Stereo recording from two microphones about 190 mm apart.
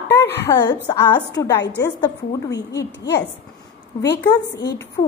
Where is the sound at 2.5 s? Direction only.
65° left (ahead or behind).